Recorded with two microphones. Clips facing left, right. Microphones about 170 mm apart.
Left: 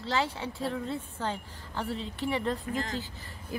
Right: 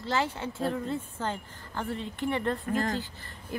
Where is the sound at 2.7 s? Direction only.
50° right (ahead or behind).